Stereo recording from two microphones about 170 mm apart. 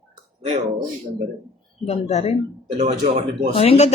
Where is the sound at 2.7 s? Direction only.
40° right (ahead or behind).